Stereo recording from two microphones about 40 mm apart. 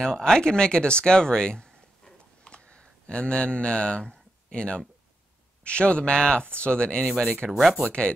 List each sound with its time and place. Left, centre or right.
0.0 s speech: centre